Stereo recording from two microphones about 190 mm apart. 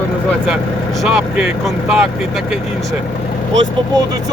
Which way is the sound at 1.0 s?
5° right (ahead or behind).